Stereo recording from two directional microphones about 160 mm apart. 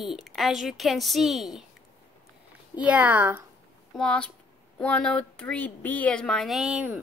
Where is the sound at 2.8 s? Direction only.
10° right (ahead or behind).